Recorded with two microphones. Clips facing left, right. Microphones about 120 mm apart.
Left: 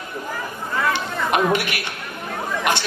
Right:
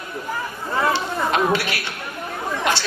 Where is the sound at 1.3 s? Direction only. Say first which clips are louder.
Left 2 dB; 15° left (ahead or behind).